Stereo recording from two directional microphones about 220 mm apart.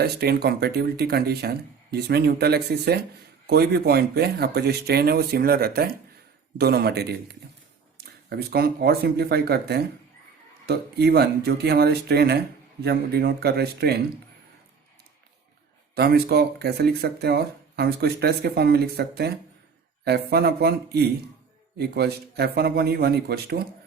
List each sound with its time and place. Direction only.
0.0 s speech: 45° right (ahead or behind)
16.0 s speech: 45° right (ahead or behind)